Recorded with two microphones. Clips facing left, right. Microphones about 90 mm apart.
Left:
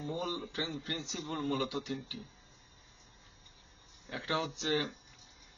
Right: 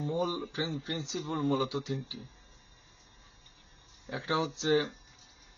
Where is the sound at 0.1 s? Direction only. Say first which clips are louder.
Right 5 dB; 20° right (ahead or behind).